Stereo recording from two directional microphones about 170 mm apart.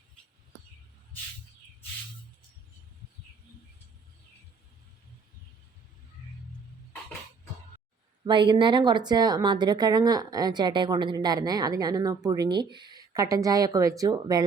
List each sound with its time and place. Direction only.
8.2 s a woman's voice: 25° right (ahead or behind)